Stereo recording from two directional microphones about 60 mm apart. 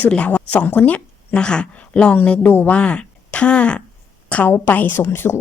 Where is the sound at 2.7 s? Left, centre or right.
Centre.